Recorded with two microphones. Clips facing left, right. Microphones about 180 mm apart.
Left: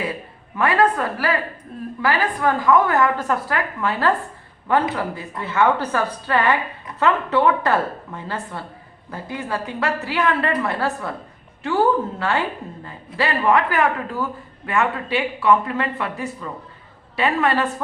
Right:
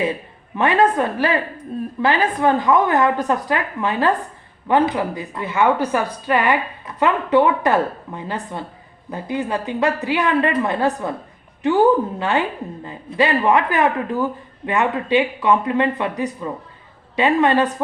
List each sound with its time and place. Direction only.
0.5 s a woman's voice: 20° right (ahead or behind)